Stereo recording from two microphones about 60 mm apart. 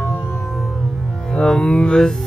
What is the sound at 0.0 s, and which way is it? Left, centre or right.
Music, left.